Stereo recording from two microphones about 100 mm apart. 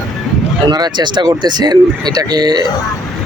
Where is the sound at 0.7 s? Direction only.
45° right (ahead or behind).